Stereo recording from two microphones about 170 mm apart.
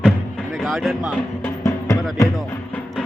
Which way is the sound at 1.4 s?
15° left (ahead or behind).